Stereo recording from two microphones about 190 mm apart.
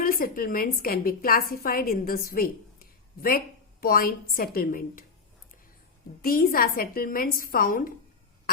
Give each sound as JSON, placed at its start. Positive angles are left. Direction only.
{"t": 0.0, "sound": "a woman's voice", "side_deg": 50}
{"t": 6.2, "sound": "a woman's voice", "side_deg": 50}